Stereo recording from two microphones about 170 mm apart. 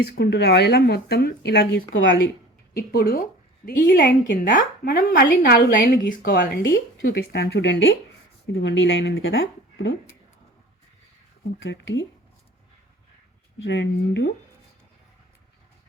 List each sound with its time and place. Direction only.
0.0 s speech: 75° left (ahead or behind); by 2.3 s 90° left
2.7 s speech: 70° left (ahead or behind); by 4.4 s 85° left
4.4 s speech: 55° left (ahead or behind); by 5.9 s 75° left (ahead or behind)
6.2 s speech: 85° left
11.6 s speech: 90° left
13.7 s speech: 90° left